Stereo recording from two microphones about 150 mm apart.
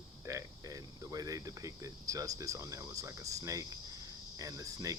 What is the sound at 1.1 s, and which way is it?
Speech, 25° right (ahead or behind).